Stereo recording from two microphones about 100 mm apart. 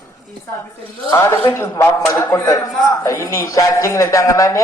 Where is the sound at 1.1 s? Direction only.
25° left (ahead or behind).